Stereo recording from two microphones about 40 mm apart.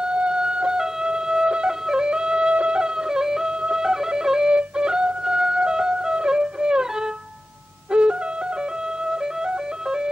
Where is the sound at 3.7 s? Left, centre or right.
Centre.